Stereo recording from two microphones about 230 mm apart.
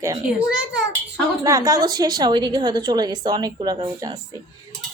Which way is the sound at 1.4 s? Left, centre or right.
Centre.